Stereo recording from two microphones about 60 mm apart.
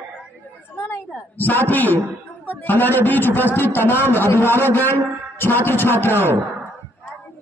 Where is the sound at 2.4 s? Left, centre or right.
Left.